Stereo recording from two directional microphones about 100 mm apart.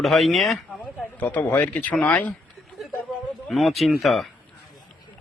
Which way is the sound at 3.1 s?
Centre (ahead or behind).